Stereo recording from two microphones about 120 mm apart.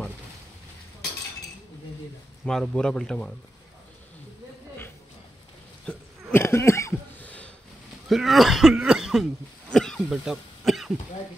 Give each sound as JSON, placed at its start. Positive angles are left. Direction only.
{"t": 2.4, "sound": "speech", "side_deg": 5}
{"t": 5.9, "sound": "hiccup", "side_deg": 20}
{"t": 7.2, "sound": "sniff", "side_deg": 10}
{"t": 8.1, "sound": "speech", "side_deg": 0}
{"t": 9.7, "sound": "cough", "side_deg": 5}